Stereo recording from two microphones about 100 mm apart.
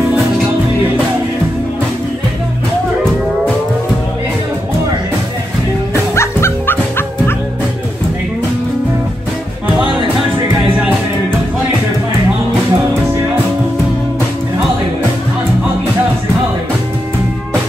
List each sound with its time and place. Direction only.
6.1 s music: 25° left (ahead or behind)